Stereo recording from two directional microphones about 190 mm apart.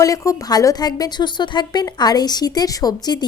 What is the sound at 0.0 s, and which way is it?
A woman's voice, 15° left (ahead or behind).